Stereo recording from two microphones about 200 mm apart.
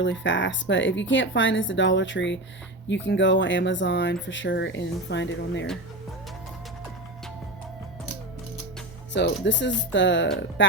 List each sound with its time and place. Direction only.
0.0 s speech: 65° left (ahead or behind)
9.1 s speech: 60° left (ahead or behind)